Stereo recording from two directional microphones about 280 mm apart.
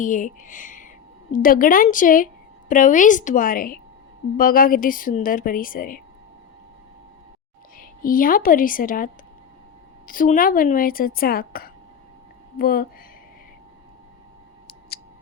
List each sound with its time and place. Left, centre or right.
0.0 s a woman's voice: left
7.8 s a woman's voice: left
10.1 s speech: left